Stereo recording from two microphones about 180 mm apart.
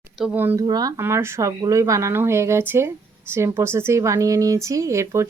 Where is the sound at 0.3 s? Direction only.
10° right (ahead or behind).